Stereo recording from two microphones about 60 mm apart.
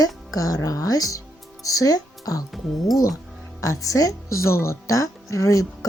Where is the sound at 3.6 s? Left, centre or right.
Left.